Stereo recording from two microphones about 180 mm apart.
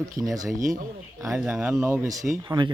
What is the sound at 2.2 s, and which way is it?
Speech, 25° right (ahead or behind).